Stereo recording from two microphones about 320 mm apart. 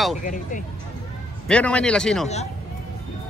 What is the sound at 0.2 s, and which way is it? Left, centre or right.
Speech, left.